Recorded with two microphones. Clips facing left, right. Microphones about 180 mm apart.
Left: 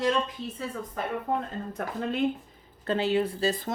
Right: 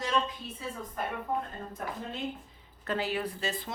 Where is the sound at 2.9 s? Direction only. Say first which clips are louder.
Left 6 dB; 25° left (ahead or behind).